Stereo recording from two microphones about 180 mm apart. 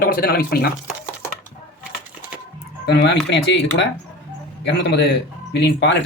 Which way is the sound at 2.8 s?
70° left (ahead or behind).